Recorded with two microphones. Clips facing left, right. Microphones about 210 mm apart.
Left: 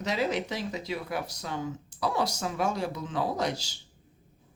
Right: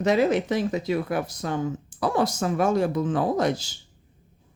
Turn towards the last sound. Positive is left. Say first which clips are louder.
# right 7 dB
turn(degrees=-50)  # may be behind; listen again after turning